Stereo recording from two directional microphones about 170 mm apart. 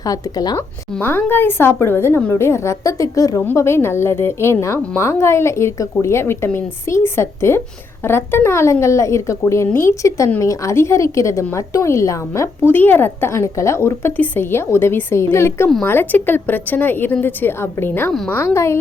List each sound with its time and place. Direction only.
0.0 s a woman's voice: 20° left (ahead or behind)
18.1 s a woman's voice: centre (ahead or behind)
18.3 s a woman's voice: 15° left (ahead or behind)